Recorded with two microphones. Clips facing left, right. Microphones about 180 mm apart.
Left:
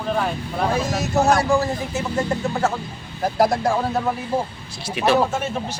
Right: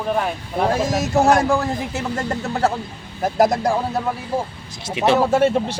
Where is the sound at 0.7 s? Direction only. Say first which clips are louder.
Right 1 dB; 45° right (ahead or behind).